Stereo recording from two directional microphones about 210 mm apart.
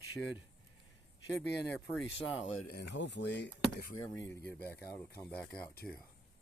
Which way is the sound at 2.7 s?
55° left (ahead or behind).